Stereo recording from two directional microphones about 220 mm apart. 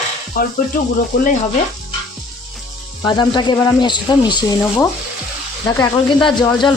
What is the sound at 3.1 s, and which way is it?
Speech, 20° left (ahead or behind).